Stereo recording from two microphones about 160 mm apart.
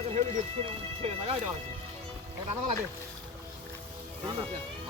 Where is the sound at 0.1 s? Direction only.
45° right (ahead or behind).